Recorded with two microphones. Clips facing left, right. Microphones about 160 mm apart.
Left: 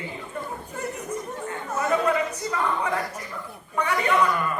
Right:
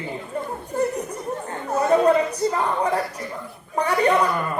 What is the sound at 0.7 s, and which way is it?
A man's voice, 35° right (ahead or behind).